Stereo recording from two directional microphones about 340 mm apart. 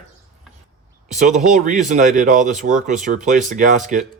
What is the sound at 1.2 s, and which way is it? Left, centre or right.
Speech, right.